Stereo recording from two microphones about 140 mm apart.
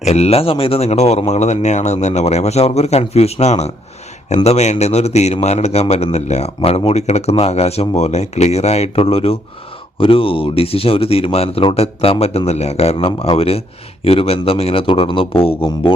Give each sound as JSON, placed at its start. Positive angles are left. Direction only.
{"t": 0.0, "sound": "speech", "side_deg": 50}